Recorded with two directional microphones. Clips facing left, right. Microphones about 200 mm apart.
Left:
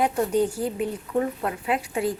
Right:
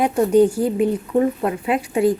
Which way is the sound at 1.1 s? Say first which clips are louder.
Right 7 dB; 25° right (ahead or behind).